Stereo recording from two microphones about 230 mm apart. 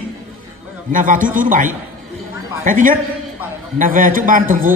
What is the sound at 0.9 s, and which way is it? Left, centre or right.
A woman's voice, right.